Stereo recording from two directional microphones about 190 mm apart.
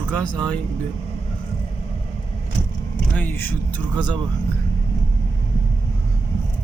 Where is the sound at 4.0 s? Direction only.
25° right (ahead or behind).